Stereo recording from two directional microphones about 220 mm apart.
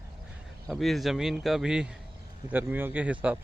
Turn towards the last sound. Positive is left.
turn(degrees=-5)  # may be behind; listen again after turning